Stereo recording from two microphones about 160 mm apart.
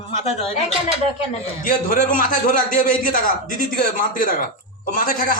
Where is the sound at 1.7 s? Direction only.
60° left (ahead or behind).